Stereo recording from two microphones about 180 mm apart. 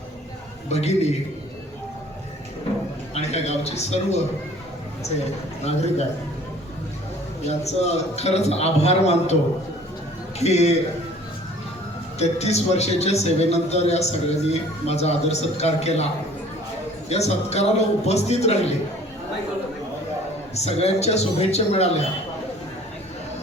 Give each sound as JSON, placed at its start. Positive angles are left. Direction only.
{"t": 0.7, "sound": "a man's voice", "side_deg": 35}
{"t": 3.2, "sound": "a man's voice", "side_deg": 35}
{"t": 7.4, "sound": "a man's voice", "side_deg": 35}
{"t": 10.4, "sound": "a man's voice", "side_deg": 35}
{"t": 12.2, "sound": "a man's voice", "side_deg": 35}
{"t": 17.1, "sound": "a man's voice", "side_deg": 35}
{"t": 20.6, "sound": "a man's voice", "side_deg": 35}